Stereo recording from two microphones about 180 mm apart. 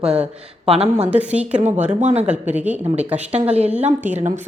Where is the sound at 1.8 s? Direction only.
40° right (ahead or behind).